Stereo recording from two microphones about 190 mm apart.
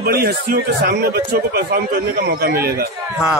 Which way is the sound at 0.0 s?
55° right (ahead or behind).